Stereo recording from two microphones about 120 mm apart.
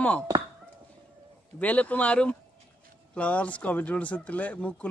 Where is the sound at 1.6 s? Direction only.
10° left (ahead or behind).